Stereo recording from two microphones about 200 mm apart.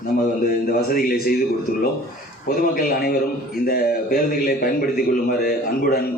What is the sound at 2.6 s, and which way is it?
A man's voice, 45° left (ahead or behind).